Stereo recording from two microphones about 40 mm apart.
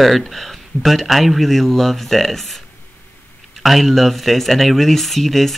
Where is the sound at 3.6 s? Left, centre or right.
Centre.